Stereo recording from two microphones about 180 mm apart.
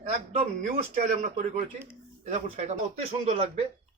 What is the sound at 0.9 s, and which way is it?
Speech, 50° right (ahead or behind).